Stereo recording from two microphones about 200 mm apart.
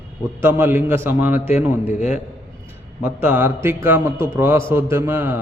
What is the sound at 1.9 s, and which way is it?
Speech, 35° left (ahead or behind).